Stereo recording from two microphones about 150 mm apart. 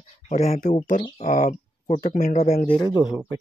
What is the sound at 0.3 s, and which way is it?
Speech, 50° left (ahead or behind).